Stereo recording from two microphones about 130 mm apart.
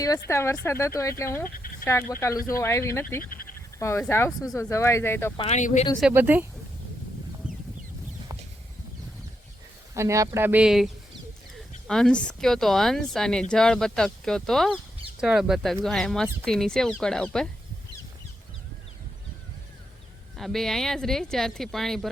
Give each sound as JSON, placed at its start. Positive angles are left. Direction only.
{"t": 0.0, "sound": "speech", "side_deg": 25}
{"t": 1.5, "sound": "speech", "side_deg": 90}
{"t": 1.8, "sound": "speech", "side_deg": 20}
{"t": 3.2, "sound": "sheep", "side_deg": 90}
{"t": 3.8, "sound": "speech", "side_deg": 20}
{"t": 5.5, "sound": "speech", "side_deg": 65}
{"t": 6.1, "sound": "speech", "side_deg": -15}
{"t": 7.4, "sound": "fowl", "side_deg": -10}
{"t": 9.9, "sound": "speech", "side_deg": -25}
{"t": 20.3, "sound": "speech", "side_deg": 0}